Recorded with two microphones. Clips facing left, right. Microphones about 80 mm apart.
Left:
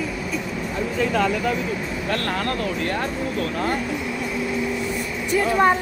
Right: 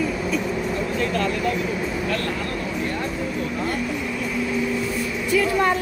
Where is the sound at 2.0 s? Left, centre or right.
Left.